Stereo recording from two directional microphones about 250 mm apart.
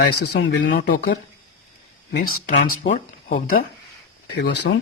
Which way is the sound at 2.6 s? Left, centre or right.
Left.